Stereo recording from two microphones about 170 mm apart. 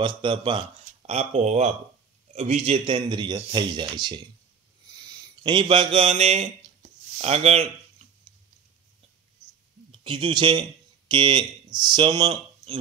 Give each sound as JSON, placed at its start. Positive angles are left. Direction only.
{"t": 0.0, "sound": "a man's voice", "side_deg": -30}
{"t": 9.8, "sound": "speech", "side_deg": -30}